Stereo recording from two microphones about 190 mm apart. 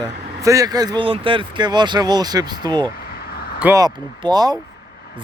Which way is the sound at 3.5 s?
10° right (ahead or behind).